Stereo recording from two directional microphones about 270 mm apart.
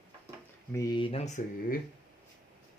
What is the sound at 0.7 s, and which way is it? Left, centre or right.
Speech, centre.